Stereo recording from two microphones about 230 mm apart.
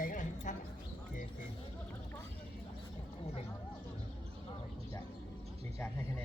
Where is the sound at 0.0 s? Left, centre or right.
Left.